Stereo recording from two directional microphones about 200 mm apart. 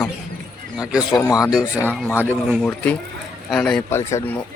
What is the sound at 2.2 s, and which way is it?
Speech, 10° right (ahead or behind).